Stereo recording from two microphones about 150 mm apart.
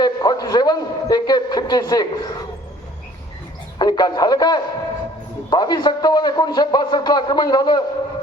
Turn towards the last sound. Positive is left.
turn(degrees=25)  # may be behind; listen again after turning